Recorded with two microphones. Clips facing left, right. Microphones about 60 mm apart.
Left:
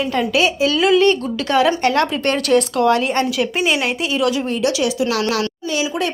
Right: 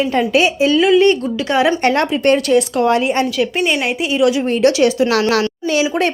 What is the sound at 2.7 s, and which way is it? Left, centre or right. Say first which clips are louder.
Speech: right 1 dB; right.